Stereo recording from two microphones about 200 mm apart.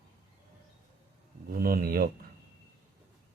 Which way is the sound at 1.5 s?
50° right (ahead or behind).